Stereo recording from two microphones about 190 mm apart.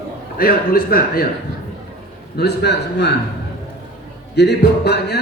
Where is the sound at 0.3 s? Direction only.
50° left (ahead or behind).